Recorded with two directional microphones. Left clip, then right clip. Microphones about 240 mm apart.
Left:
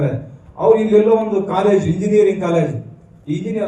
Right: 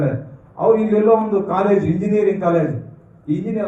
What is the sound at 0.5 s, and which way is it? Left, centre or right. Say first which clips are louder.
A man's voice: left 3 dB; left.